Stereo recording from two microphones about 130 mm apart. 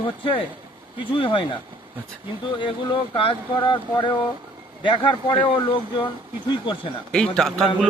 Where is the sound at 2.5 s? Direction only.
40° left (ahead or behind).